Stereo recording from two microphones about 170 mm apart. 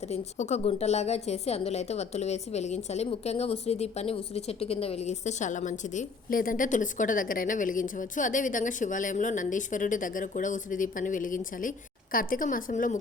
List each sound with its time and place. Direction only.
0.1 s a woman's voice: 40° left (ahead or behind)